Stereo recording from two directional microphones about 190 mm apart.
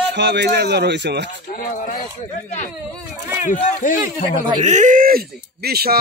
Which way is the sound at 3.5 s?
45° left (ahead or behind).